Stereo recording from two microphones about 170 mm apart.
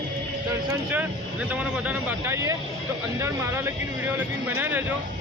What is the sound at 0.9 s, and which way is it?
Speech, 10° right (ahead or behind).